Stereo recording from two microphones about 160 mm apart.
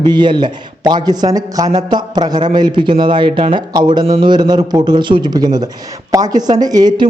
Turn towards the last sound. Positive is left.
turn(degrees=-25)  # may be behind; listen again after turning